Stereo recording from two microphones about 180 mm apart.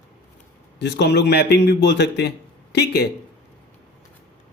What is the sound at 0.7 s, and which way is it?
A man's voice, 70° left (ahead or behind).